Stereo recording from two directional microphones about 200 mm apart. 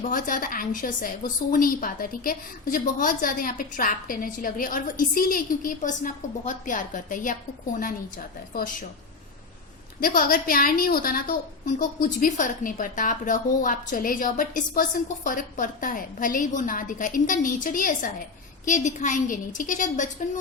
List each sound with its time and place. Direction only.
0.1 s a woman's voice: 45° left (ahead or behind)
10.0 s a woman's voice: 45° left (ahead or behind)